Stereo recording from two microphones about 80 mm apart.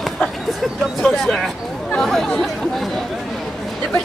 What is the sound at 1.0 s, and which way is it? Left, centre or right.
Bird, centre.